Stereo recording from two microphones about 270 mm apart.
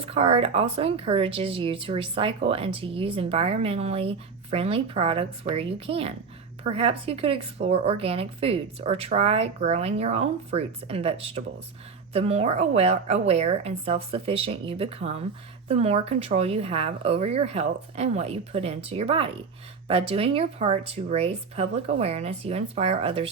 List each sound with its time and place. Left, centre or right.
0.0 s speech: right